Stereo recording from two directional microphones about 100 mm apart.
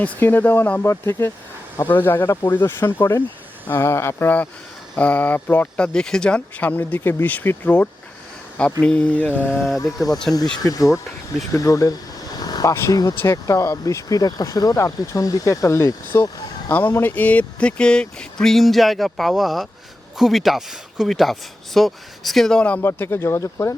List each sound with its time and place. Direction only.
0.0 s speech: 20° left (ahead or behind)
6.7 s speech: 20° left (ahead or behind)
9.3 s a sound: 10° right (ahead or behind)
9.8 s speech: 35° left (ahead or behind)
12.4 s vehicle: 40° left (ahead or behind)
12.9 s speech: 35° left (ahead or behind)
16.7 s speech: 20° left (ahead or behind)
22.9 s speech: 25° left (ahead or behind)